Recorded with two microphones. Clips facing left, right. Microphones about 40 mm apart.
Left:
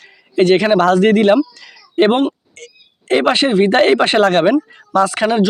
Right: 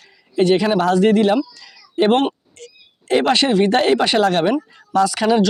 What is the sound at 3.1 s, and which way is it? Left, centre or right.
Speech, left.